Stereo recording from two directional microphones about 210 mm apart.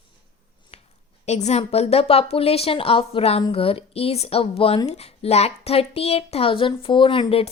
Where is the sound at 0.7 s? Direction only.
30° left (ahead or behind).